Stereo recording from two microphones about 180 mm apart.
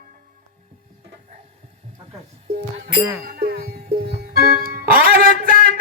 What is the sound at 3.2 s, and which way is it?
Music, 55° right (ahead or behind).